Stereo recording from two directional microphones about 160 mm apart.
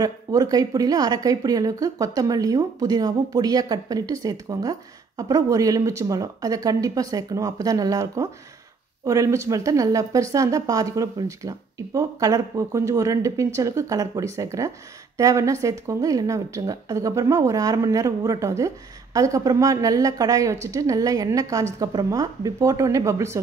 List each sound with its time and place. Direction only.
0.0 s speech: 25° right (ahead or behind)